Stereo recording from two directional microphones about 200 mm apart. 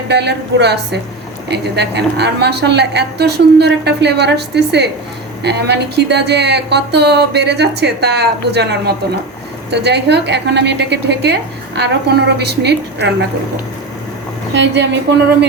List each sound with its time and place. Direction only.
0.1 s a woman's voice: 55° right (ahead or behind)
9.6 s a woman's voice: 55° right (ahead or behind)
14.5 s a woman's voice: 60° right (ahead or behind)